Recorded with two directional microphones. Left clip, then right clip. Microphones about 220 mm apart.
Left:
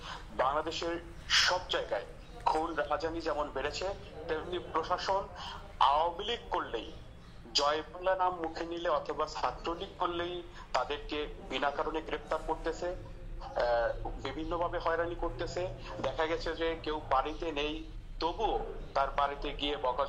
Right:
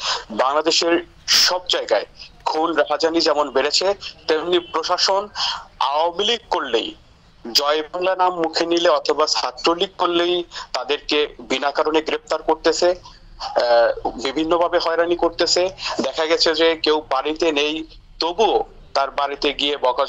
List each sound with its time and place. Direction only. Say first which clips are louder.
0.0 s speech: right 13 dB; 50° right (ahead or behind)